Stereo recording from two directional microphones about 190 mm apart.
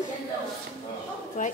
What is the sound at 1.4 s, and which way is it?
Speech, 40° left (ahead or behind).